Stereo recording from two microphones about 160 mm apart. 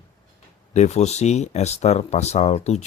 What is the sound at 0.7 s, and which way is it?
Speech, 45° left (ahead or behind).